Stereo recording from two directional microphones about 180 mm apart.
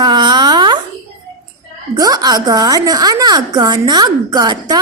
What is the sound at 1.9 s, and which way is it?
A woman's voice, 20° right (ahead or behind).